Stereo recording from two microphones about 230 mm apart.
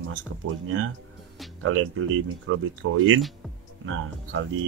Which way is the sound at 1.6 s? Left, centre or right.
Right.